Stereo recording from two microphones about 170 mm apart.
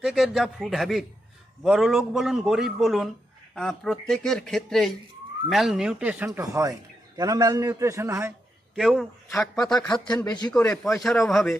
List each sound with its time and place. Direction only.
0.0 s a man's voice: centre (ahead or behind)
8.7 s a man's voice: centre (ahead or behind)
9.9 s a man's voice: 25° left (ahead or behind)
11.0 s a man's voice: centre (ahead or behind)